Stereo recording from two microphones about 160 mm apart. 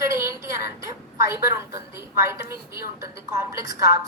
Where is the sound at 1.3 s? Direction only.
15° right (ahead or behind).